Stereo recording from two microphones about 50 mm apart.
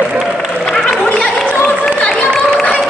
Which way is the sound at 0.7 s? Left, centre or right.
Centre.